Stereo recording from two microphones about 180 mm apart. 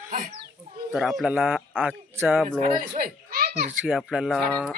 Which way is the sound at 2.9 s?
55° right (ahead or behind).